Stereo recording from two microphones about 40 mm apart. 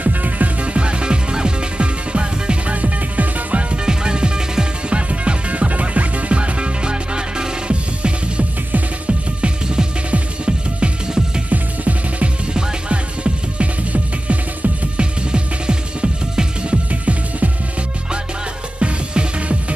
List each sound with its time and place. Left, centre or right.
0.0 s music: right
0.7 s music: right
3.7 s music: right
11.5 s music: right
12.5 s music: right
13.9 s music: right
18.8 s music: right